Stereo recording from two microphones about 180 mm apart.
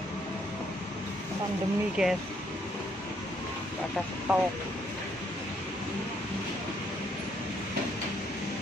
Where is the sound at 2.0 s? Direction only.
Centre (ahead or behind).